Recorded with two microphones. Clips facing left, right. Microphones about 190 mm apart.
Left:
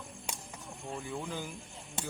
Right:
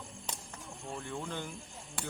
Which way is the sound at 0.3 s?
10° left (ahead or behind).